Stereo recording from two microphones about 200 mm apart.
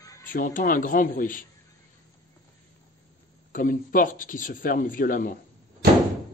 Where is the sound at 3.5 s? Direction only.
45° left (ahead or behind).